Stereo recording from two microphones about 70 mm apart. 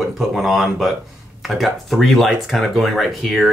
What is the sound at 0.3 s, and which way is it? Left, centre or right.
Speech, centre.